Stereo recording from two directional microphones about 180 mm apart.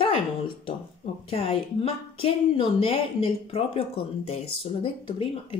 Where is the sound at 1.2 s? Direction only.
35° left (ahead or behind).